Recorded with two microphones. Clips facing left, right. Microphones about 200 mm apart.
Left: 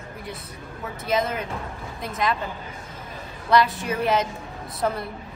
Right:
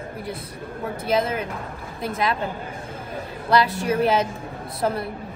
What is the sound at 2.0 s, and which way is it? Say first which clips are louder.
Speech: right 1 dB; 30° right (ahead or behind).